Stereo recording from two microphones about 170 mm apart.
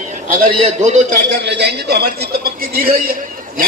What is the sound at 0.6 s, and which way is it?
Speech, 45° right (ahead or behind).